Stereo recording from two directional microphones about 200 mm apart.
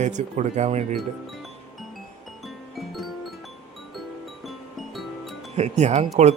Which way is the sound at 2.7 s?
Centre (ahead or behind).